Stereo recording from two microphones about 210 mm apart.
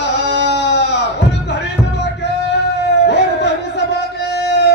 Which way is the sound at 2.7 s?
55° left (ahead or behind).